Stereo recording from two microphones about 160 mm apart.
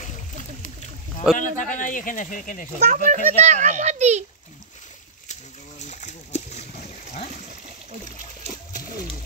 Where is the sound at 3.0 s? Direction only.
50° right (ahead or behind).